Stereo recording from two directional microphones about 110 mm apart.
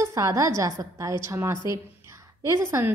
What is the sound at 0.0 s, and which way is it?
A woman's voice, 30° right (ahead or behind).